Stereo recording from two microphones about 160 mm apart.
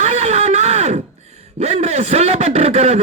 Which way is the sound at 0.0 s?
45° right (ahead or behind).